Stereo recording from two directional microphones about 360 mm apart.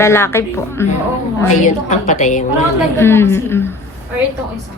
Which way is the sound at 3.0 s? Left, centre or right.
Centre.